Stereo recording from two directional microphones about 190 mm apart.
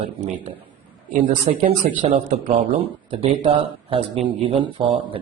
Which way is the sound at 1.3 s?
30° right (ahead or behind).